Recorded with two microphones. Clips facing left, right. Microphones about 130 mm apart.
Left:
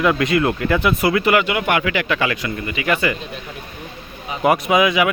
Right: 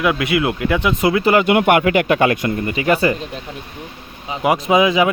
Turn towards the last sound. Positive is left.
turn(degrees=-30)  # may be behind; listen again after turning